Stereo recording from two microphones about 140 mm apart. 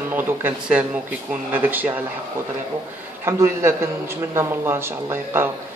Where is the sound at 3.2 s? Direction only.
15° right (ahead or behind).